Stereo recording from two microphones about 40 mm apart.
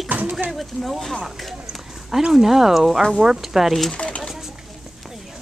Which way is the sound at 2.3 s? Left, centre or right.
Centre.